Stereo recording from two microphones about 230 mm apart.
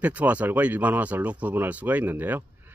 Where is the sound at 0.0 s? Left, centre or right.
Centre.